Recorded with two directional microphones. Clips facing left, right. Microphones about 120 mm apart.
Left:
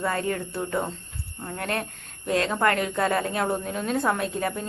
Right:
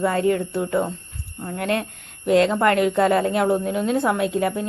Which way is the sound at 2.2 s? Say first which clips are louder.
Right 6 dB; 20° right (ahead or behind).